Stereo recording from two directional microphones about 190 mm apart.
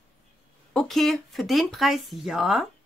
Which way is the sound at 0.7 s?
Centre (ahead or behind).